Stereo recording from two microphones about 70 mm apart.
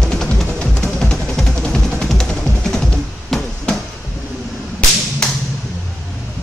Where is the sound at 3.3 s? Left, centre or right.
Centre.